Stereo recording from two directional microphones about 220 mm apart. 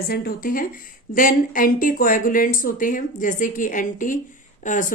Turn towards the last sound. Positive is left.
turn(degrees=35)  # may be behind; listen again after turning